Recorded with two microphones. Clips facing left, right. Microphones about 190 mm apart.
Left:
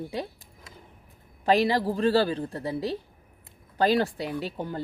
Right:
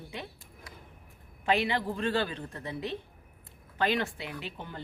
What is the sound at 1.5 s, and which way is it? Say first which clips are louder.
A woman's voice: left 6 dB; 35° left (ahead or behind).